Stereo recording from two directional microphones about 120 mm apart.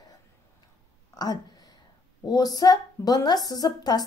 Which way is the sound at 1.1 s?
35° left (ahead or behind).